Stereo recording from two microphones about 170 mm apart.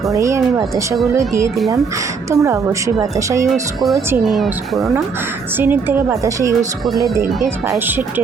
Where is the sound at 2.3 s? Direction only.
20° right (ahead or behind).